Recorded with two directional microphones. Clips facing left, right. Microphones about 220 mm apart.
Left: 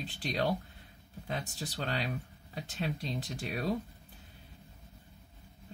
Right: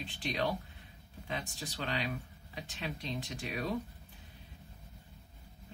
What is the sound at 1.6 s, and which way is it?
Speech, 40° left (ahead or behind).